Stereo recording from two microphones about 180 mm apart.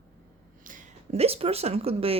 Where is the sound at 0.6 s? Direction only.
40° right (ahead or behind).